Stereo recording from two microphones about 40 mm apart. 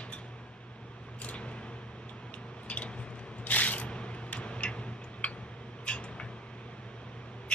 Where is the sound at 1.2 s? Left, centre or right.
Left.